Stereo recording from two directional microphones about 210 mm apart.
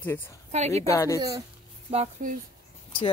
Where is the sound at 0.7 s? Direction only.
15° left (ahead or behind).